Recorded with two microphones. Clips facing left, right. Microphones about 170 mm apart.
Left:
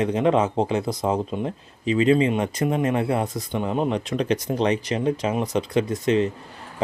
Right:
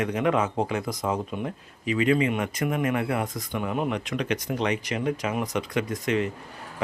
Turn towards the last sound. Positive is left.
turn(degrees=30)  # may be behind; listen again after turning